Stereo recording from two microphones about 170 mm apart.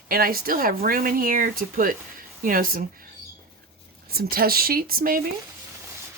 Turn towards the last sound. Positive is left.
turn(degrees=-60)  # may be behind; listen again after turning